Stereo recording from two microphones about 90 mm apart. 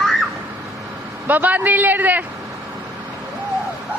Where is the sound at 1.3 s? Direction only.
20° right (ahead or behind).